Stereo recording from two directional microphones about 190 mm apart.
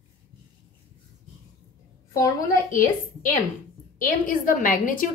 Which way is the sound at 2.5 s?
45° left (ahead or behind).